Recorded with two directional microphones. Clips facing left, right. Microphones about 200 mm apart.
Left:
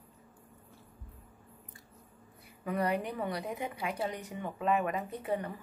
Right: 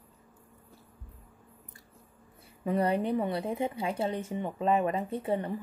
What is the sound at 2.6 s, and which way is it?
Speech, 25° right (ahead or behind).